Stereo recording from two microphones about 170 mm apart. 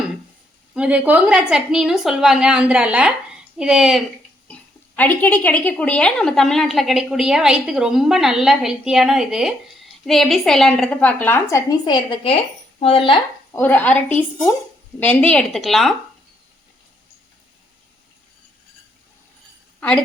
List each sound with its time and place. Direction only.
0.7 s a woman's voice: 5° right (ahead or behind)
4.9 s a woman's voice: 10° left (ahead or behind); by 13.1 s 30° left (ahead or behind)
13.6 s a woman's voice: 10° left (ahead or behind)